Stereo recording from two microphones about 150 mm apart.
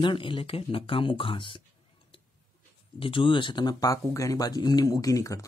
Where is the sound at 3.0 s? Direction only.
35° left (ahead or behind).